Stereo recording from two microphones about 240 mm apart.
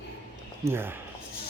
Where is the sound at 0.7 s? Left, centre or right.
Centre.